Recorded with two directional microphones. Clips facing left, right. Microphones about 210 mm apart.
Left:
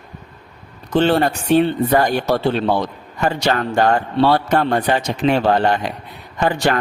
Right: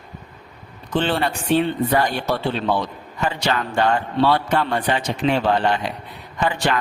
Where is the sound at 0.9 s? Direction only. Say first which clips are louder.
Left 6 dB; 45° left (ahead or behind).